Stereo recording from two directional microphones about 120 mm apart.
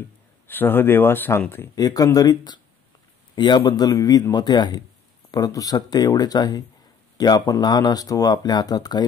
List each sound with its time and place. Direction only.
0.5 s speech: 15° left (ahead or behind)
1.8 s speech: 30° left (ahead or behind)